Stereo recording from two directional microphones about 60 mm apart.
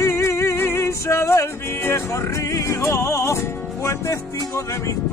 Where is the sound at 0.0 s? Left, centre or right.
Left.